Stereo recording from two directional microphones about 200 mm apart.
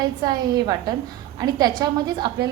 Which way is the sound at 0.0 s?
20° right (ahead or behind).